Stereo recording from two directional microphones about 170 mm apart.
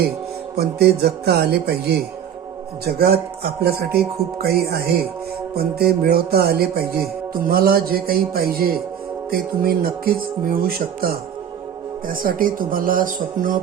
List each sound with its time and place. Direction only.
0.5 s speech: 70° right (ahead or behind); by 13.6 s 50° right (ahead or behind)